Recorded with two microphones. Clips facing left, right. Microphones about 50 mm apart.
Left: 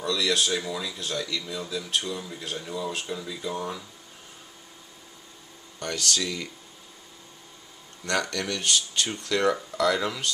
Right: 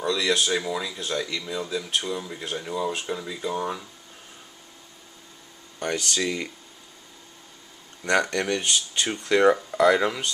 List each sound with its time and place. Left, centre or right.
0.0 s speech: centre
5.8 s speech: centre
8.0 s speech: right